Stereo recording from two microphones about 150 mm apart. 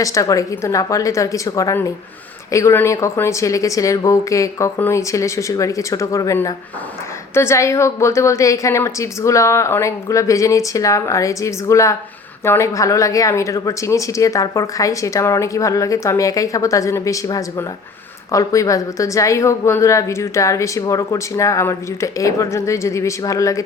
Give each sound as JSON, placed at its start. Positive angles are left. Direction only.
{"t": 0.0, "sound": "speech", "side_deg": 20}